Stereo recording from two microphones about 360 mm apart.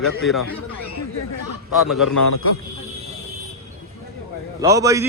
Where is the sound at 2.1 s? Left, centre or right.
Left.